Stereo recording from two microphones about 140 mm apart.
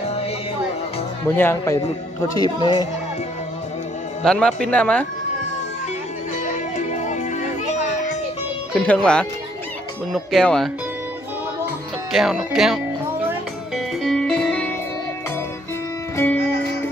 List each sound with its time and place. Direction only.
1.2 s a woman's voice: 15° left (ahead or behind)
4.2 s speech: 5° left (ahead or behind)
6.4 s music: 65° left (ahead or behind)
8.7 s speech: 10° left (ahead or behind)
12.1 s speech: centre (ahead or behind)
13.7 s music: centre (ahead or behind)